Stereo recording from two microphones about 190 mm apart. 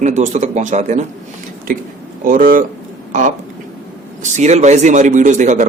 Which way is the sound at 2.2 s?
45° right (ahead or behind).